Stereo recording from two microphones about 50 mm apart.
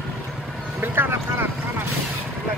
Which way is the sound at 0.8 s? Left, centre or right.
Right.